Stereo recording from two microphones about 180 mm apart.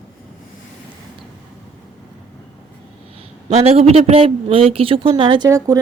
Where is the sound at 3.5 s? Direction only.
35° right (ahead or behind).